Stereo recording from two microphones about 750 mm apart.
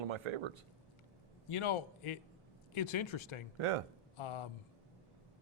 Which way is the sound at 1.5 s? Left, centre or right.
Left.